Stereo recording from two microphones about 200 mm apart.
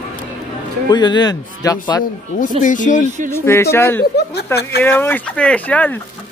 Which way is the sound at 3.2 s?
10° left (ahead or behind).